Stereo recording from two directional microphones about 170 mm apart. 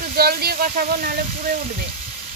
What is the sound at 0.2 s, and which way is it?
Speech, 65° right (ahead or behind).